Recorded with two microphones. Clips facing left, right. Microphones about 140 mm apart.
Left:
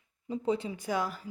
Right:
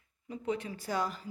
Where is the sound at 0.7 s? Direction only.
15° left (ahead or behind).